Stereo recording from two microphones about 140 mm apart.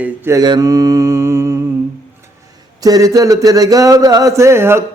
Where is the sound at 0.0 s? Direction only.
25° right (ahead or behind).